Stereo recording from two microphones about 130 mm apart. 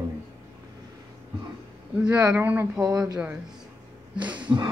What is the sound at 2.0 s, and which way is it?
Speech, 10° right (ahead or behind).